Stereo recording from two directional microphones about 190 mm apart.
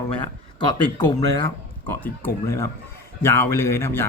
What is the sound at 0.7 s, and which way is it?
Speech, 25° left (ahead or behind).